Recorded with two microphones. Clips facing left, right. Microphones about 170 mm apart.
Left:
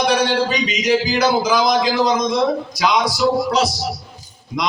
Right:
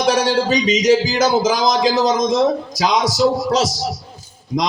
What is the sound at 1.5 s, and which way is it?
A man's voice, 40° right (ahead or behind).